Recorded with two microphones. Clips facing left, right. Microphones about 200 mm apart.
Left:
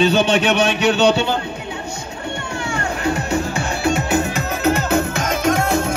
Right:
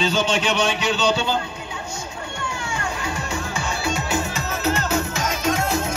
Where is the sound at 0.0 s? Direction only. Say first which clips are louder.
Left 6 dB; 60° left (ahead or behind).